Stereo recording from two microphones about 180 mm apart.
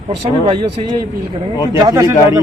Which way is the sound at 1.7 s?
20° right (ahead or behind).